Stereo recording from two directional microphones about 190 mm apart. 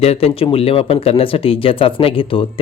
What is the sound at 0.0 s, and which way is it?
Speech, 30° left (ahead or behind).